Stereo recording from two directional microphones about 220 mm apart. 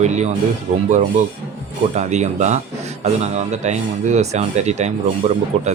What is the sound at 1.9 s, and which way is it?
Speech, 30° right (ahead or behind).